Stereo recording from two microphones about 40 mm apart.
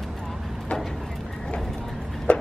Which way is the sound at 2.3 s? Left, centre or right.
Left.